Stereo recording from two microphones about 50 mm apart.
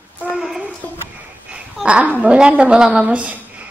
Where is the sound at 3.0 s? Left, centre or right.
Right.